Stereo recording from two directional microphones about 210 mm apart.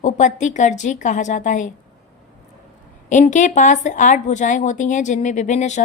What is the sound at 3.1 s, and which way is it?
Speech, 35° left (ahead or behind).